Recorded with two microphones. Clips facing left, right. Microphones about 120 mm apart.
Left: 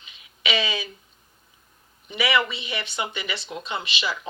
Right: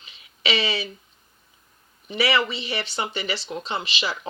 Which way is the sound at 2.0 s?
35° right (ahead or behind).